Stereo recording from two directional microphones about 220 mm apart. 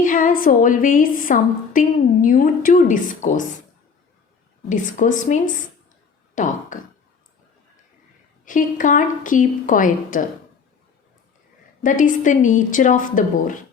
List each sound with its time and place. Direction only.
0.0 s a woman's voice: 35° left (ahead or behind)
4.7 s a woman's voice: 35° left (ahead or behind)
8.4 s a woman's voice: 35° left (ahead or behind)
11.8 s a woman's voice: 35° left (ahead or behind)